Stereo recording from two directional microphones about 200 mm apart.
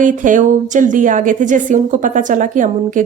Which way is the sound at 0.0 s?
40° right (ahead or behind).